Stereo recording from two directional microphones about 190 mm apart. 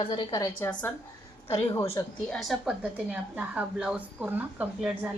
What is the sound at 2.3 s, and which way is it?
A woman's voice, centre (ahead or behind).